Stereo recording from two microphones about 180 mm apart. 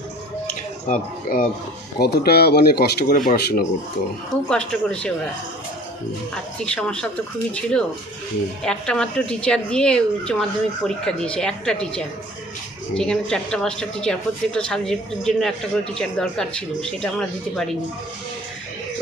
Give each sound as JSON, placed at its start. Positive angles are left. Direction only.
{"t": 0.4, "sound": "drip", "side_deg": 50}
{"t": 2.0, "sound": "speech", "side_deg": 60}
{"t": 4.4, "sound": "speech", "side_deg": 5}
{"t": 6.7, "sound": "speech", "side_deg": 5}